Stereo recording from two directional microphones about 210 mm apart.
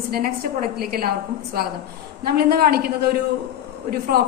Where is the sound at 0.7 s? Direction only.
45° right (ahead or behind).